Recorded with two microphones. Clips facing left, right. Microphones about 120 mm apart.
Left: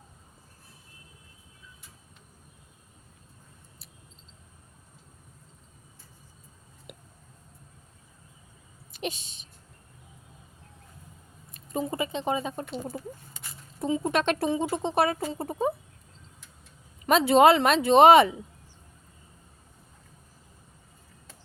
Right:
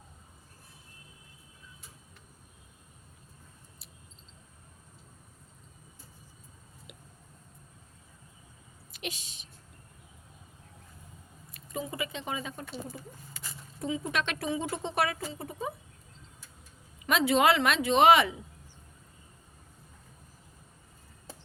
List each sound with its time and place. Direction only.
8.9 s a sound: 30° left (ahead or behind)
11.5 s speech: 35° left (ahead or behind)
17.1 s speech: 35° left (ahead or behind)